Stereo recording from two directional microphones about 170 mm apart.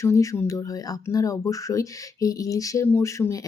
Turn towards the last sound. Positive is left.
turn(degrees=20)  # may be behind; listen again after turning